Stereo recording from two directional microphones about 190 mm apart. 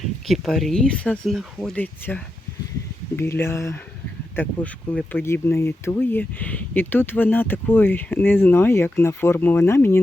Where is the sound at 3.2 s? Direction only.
15° left (ahead or behind).